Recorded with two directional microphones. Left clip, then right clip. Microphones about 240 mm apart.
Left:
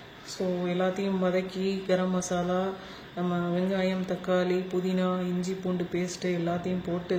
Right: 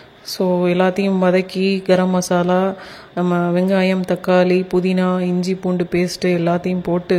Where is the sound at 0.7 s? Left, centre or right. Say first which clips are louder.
Right 12 dB; right.